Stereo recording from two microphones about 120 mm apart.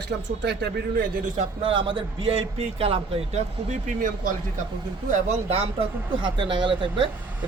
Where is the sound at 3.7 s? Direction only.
90° right.